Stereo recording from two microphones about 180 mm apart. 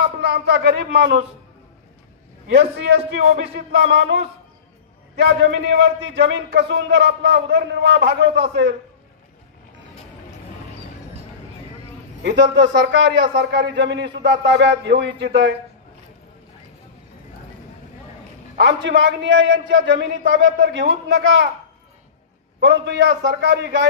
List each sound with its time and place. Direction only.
0.2 s a man's voice: 80° right
2.5 s a man's voice: 70° right (ahead or behind)
5.1 s a man's voice: 70° right (ahead or behind)
12.2 s a man's voice: 75° right (ahead or behind)
18.6 s a man's voice: 75° right (ahead or behind)
22.6 s a man's voice: 75° right (ahead or behind)